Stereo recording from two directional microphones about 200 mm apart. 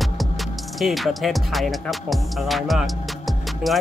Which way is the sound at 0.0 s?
Centre (ahead or behind).